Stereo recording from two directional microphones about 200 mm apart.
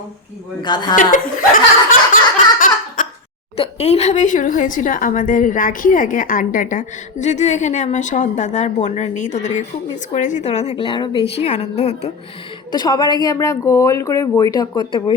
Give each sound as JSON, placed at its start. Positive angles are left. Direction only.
{"t": 0.6, "sound": "speech", "side_deg": 20}
{"t": 1.1, "sound": "chuckle", "side_deg": 45}
{"t": 2.6, "sound": "a sound", "side_deg": 40}
{"t": 3.6, "sound": "a woman's voice", "side_deg": 30}
{"t": 12.7, "sound": "speech", "side_deg": 20}